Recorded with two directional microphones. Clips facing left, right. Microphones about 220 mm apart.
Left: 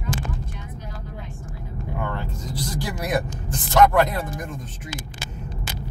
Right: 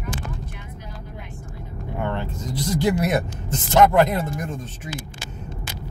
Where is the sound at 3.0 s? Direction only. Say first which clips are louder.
Right 3 dB; 25° right (ahead or behind).